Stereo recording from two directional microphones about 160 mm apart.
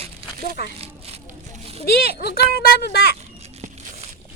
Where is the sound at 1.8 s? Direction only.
70° left (ahead or behind).